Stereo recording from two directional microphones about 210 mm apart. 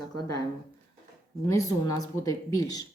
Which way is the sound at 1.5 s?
15° left (ahead or behind).